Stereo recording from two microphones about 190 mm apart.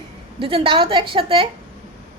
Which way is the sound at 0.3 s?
30° right (ahead or behind).